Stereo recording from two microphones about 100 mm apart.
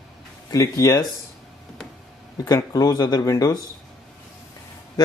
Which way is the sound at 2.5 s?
40° left (ahead or behind).